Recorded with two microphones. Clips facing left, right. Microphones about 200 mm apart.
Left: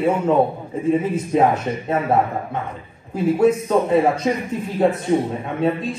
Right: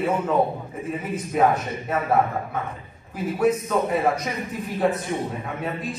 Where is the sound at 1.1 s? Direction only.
30° left (ahead or behind).